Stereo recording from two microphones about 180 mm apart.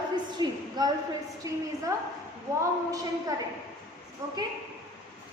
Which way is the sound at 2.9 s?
20° right (ahead or behind).